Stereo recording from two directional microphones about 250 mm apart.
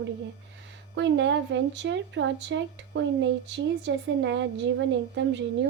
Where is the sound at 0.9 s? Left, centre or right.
Right.